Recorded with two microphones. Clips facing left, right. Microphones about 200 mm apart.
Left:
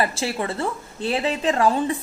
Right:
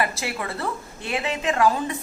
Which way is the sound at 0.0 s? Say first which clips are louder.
Left 3 dB; 30° left (ahead or behind).